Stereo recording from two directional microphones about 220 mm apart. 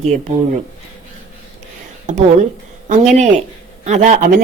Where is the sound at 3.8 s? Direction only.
30° right (ahead or behind).